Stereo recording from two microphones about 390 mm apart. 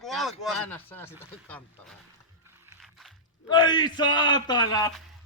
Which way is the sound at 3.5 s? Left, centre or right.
Centre.